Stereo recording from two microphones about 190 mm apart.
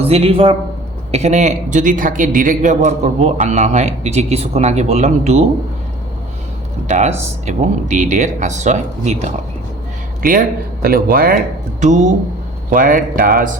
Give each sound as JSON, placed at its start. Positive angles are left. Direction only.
{"t": 0.0, "sound": "a man's voice", "side_deg": -30}
{"t": 6.8, "sound": "a man's voice", "side_deg": -40}
{"t": 10.8, "sound": "speech", "side_deg": -50}
{"t": 11.8, "sound": "a man's voice", "side_deg": -40}